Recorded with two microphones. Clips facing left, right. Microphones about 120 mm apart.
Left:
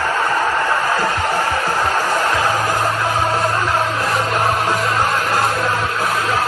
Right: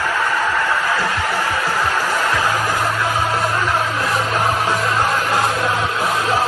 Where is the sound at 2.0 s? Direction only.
15° left (ahead or behind).